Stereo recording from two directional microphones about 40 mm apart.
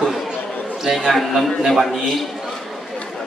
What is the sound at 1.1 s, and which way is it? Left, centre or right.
A man's voice, centre.